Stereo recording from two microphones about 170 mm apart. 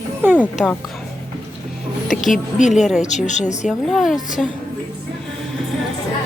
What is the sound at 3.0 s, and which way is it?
Speech, 45° left (ahead or behind).